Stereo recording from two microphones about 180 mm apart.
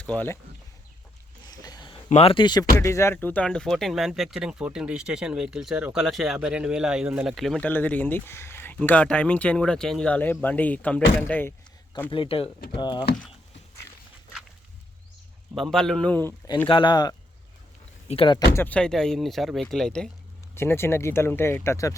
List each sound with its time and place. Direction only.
0.0 s speech: 10° left (ahead or behind)
1.5 s a sound: 20° left (ahead or behind)
2.0 s speech: 35° left (ahead or behind); by 11.5 s 10° left (ahead or behind)
12.1 s speech: 30° left (ahead or behind)
15.5 s speech: centre (ahead or behind)
16.6 s speech: 25° left (ahead or behind)
18.5 s speech: 10° left (ahead or behind)